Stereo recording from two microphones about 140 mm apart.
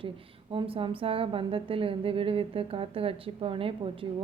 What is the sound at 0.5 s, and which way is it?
Speech, 40° right (ahead or behind).